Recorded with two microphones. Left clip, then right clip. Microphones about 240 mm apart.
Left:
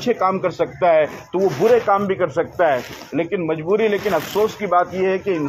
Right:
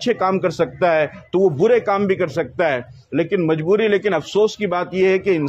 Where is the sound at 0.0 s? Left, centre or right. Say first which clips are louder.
Even; right.